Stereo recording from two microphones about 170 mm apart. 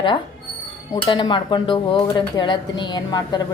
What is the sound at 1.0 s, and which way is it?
Speech, 30° left (ahead or behind).